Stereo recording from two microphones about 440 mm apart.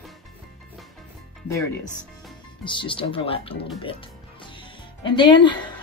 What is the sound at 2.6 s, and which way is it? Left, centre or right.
Speech, centre.